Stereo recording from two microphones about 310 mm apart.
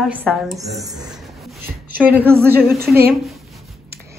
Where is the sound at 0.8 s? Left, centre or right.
Centre.